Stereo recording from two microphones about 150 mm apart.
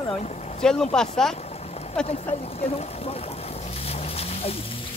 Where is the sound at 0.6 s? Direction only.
5° left (ahead or behind).